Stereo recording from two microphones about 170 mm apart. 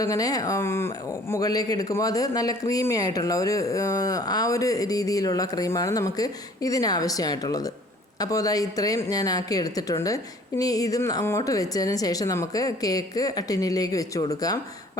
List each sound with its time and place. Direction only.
0.0 s speech: 20° left (ahead or behind)